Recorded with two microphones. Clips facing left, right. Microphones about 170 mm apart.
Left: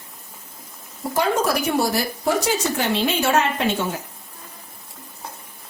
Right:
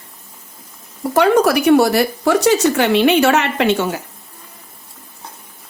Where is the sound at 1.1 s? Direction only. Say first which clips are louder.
Right 8 dB; 70° right (ahead or behind).